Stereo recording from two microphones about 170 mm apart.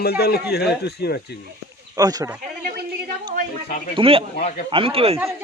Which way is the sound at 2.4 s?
55° right (ahead or behind).